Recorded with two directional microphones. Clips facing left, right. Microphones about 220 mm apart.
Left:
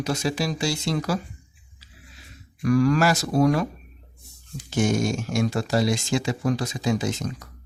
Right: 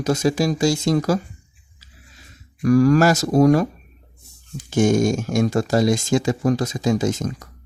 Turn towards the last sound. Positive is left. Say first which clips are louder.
# right 5 dB
turn(degrees=-45)  # may be behind; listen again after turning